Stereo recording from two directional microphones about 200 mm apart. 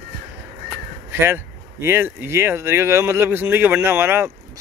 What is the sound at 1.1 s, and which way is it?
Speech, 10° right (ahead or behind).